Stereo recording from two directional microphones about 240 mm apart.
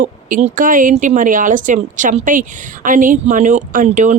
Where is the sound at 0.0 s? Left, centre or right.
Right.